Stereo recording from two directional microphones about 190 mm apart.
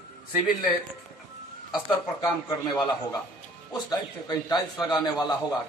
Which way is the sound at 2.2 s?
20° left (ahead or behind).